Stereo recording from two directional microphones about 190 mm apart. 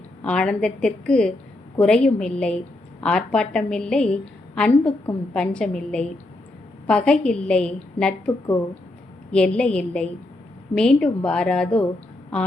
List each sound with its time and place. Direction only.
0.2 s a woman's voice: 5° left (ahead or behind)
9.3 s a woman's voice: 5° left (ahead or behind)